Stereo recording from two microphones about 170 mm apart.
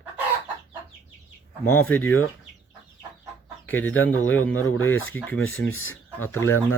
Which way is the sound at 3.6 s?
10° left (ahead or behind).